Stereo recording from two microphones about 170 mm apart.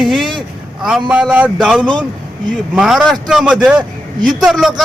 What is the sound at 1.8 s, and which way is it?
Speech, 25° right (ahead or behind).